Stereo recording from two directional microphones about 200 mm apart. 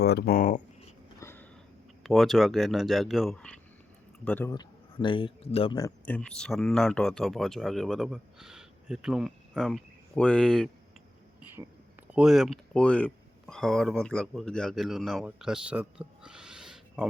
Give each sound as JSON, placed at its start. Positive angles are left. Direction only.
{"t": 0.0, "sound": "speech", "side_deg": 55}
{"t": 1.2, "sound": "sniff", "side_deg": 10}
{"t": 2.0, "sound": "speech", "side_deg": 0}
{"t": 4.5, "sound": "a man's voice", "side_deg": 25}
{"t": 6.1, "sound": "speech", "side_deg": 5}
{"t": 12.1, "sound": "speech", "side_deg": 0}